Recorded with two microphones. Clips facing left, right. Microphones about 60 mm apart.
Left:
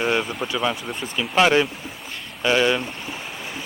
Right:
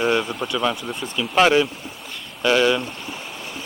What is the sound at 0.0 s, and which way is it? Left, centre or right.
Speech, centre.